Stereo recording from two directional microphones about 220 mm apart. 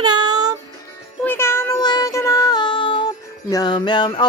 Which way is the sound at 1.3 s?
10° left (ahead or behind).